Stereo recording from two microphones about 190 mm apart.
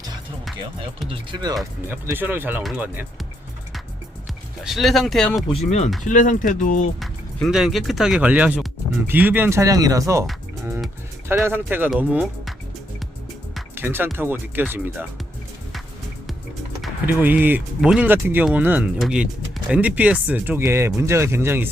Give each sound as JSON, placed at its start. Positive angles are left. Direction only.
{"t": 1.0, "sound": "speech", "side_deg": -25}
{"t": 1.9, "sound": "speech", "side_deg": -10}
{"t": 4.6, "sound": "speech", "side_deg": 0}
{"t": 5.6, "sound": "speech", "side_deg": 35}
{"t": 7.0, "sound": "speech", "side_deg": 0}
{"t": 11.4, "sound": "speech", "side_deg": -10}
{"t": 13.7, "sound": "speech", "side_deg": -10}
{"t": 17.1, "sound": "speech", "side_deg": -10}